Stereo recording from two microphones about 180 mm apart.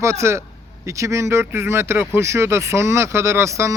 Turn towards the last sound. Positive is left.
turn(degrees=-15)  # may be behind; listen again after turning